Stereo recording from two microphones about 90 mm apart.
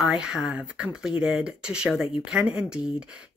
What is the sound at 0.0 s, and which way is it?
Speech, 5° right (ahead or behind).